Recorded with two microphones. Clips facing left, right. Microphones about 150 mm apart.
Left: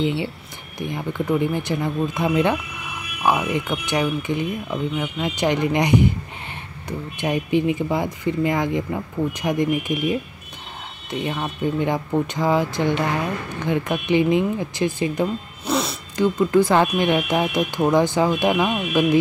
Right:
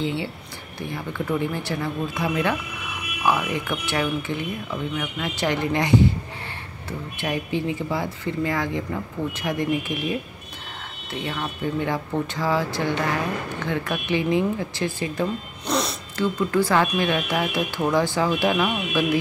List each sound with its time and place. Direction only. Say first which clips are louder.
0.0 s speech: left 4 dB; 20° left (ahead or behind)
15.6 s a sound: left 2 dB; centre (ahead or behind)
16.2 s speech: left 5 dB; 20° left (ahead or behind)